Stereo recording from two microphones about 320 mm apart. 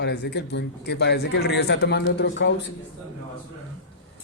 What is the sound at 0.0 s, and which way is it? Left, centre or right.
A man's voice, left.